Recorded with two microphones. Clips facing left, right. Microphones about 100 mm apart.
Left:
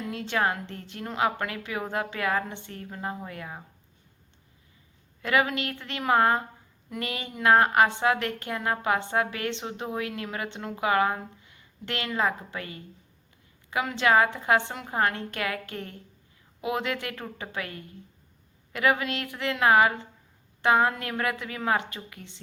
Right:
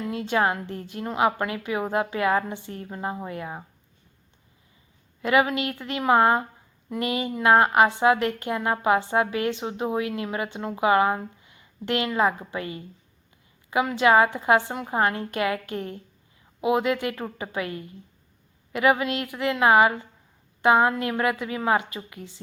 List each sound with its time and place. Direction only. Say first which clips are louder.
0.1 s a woman's voice: right 4 dB; 15° right (ahead or behind)
5.2 s a woman's voice: right 4 dB; 15° right (ahead or behind)
14.0 s a woman's voice: right 3 dB; 15° right (ahead or behind)